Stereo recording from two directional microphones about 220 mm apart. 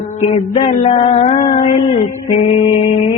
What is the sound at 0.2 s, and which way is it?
Music, 30° left (ahead or behind).